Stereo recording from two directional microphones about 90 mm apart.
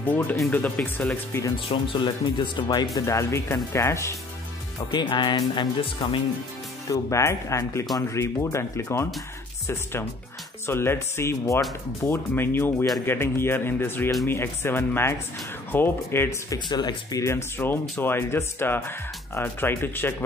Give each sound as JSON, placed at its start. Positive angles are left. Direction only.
{"t": 0.0, "sound": "speech", "side_deg": 20}
{"t": 1.7, "sound": "speech", "side_deg": 75}
{"t": 2.0, "sound": "speech", "side_deg": 55}
{"t": 2.9, "sound": "speech", "side_deg": 35}
{"t": 4.9, "sound": "speech", "side_deg": 55}
{"t": 6.9, "sound": "speech", "side_deg": 35}
{"t": 10.7, "sound": "speech", "side_deg": 25}
{"t": 16.5, "sound": "speech", "side_deg": 55}
{"t": 17.2, "sound": "speech", "side_deg": 30}